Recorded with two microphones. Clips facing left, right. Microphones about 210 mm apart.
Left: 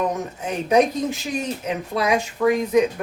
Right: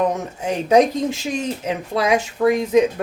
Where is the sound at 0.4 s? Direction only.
30° right (ahead or behind).